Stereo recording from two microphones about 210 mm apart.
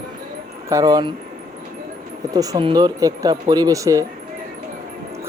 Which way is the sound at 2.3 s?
15° right (ahead or behind).